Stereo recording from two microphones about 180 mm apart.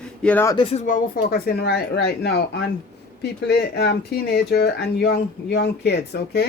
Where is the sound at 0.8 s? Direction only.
50° left (ahead or behind).